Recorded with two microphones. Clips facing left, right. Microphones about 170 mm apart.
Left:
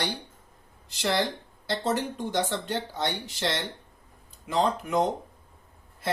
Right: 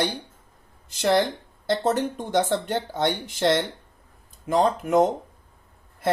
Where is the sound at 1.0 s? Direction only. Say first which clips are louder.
Right 6 dB; 50° right (ahead or behind).